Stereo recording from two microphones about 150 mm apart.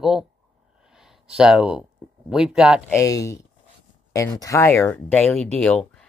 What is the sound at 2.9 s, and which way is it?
Speech, 20° left (ahead or behind).